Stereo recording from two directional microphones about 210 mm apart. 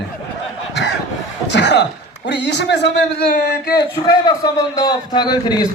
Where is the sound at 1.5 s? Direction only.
55° left (ahead or behind).